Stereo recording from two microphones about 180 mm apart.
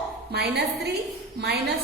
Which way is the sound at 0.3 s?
65° right (ahead or behind).